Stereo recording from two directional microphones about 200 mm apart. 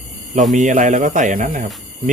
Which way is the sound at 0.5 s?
40° right (ahead or behind).